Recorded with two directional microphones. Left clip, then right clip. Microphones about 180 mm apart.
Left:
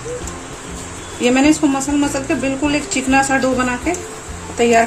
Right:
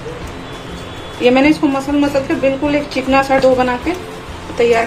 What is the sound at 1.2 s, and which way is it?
Speech, 45° left (ahead or behind).